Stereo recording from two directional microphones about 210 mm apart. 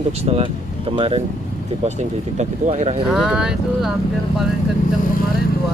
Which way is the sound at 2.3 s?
35° right (ahead or behind).